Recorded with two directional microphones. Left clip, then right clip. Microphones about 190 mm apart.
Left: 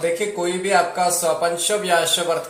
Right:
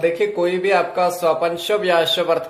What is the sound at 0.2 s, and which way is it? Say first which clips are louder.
Speech: right 4 dB; 50° right (ahead or behind).